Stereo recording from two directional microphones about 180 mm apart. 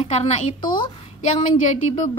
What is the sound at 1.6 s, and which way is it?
Speech, 90° right.